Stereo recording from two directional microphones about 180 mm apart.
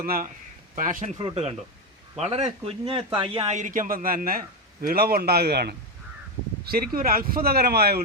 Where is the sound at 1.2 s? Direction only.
35° right (ahead or behind).